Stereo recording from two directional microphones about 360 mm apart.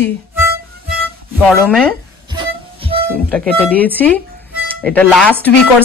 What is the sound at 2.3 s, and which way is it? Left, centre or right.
Music, centre.